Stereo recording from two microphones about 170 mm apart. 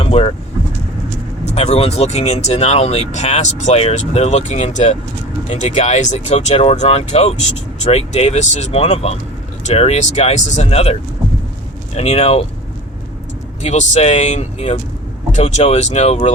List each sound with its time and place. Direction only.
0.0 s vehicle: 35° left (ahead or behind)
1.5 s speech: 40° left (ahead or behind)
11.9 s speech: 35° left (ahead or behind)
13.6 s speech: 40° left (ahead or behind)